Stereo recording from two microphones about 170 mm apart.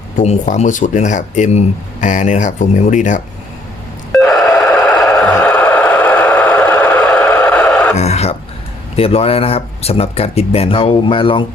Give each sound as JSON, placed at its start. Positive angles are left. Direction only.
{"t": 0.2, "sound": "speech", "side_deg": 45}
{"t": 4.1, "sound": "a sound", "side_deg": 5}
{"t": 5.3, "sound": "vehicle", "side_deg": 10}
{"t": 7.9, "sound": "speech", "side_deg": 40}